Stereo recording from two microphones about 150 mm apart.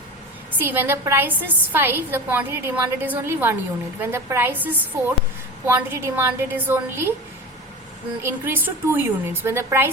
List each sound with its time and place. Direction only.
0.6 s a woman's voice: 15° right (ahead or behind)
8.2 s a woman's voice: 15° right (ahead or behind)